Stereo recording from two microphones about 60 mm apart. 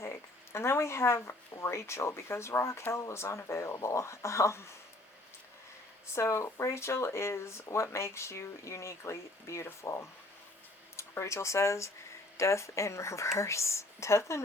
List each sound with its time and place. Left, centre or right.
0.0 s speech: left
6.1 s speech: left